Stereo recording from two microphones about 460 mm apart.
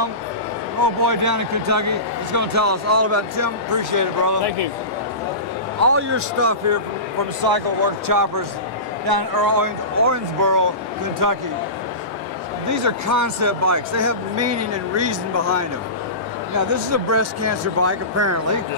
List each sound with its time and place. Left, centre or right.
1.0 s speech: right
5.8 s speech: right
7.4 s speech: right
12.6 s speech: right